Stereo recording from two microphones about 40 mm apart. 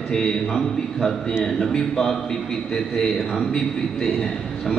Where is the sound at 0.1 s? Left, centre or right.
Centre.